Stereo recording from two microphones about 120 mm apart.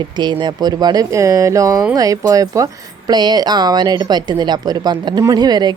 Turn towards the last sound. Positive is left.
turn(degrees=-35)  # may be behind; listen again after turning